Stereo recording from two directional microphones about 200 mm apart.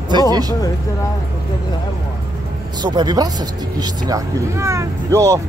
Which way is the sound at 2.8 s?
20° right (ahead or behind).